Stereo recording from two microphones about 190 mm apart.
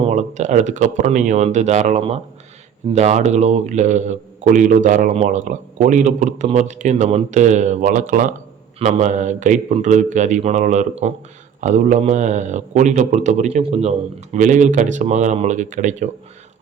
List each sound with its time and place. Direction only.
0.0 s speech: 40° right (ahead or behind)